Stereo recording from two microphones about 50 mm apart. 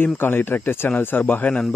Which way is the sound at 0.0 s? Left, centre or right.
Left.